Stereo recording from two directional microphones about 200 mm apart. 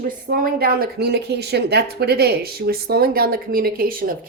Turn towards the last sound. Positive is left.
turn(degrees=-45)  # may be behind; listen again after turning